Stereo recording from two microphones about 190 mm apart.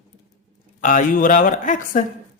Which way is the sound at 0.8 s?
45° left (ahead or behind).